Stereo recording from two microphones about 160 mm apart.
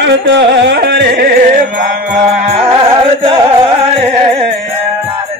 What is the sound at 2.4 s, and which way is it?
Music, 40° right (ahead or behind).